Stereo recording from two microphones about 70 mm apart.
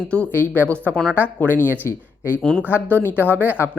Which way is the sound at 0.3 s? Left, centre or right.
Left.